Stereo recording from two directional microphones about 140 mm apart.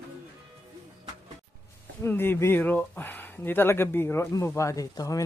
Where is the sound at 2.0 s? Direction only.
15° left (ahead or behind).